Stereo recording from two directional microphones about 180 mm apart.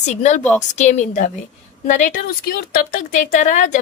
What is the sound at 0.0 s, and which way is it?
A woman's voice, 40° left (ahead or behind).